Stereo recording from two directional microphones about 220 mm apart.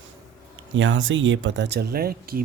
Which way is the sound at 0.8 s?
60° right (ahead or behind).